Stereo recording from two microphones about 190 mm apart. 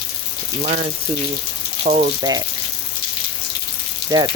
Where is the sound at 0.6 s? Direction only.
40° right (ahead or behind).